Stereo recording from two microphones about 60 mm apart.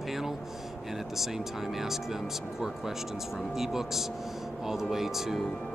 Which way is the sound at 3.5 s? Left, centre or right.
Centre.